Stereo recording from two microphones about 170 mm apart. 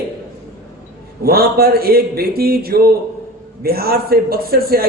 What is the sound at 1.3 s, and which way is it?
A man's voice, 65° right (ahead or behind).